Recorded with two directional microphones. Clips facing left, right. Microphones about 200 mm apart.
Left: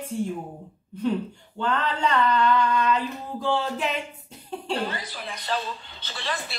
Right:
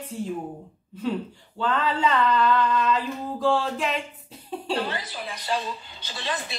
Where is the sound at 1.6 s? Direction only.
5° right (ahead or behind).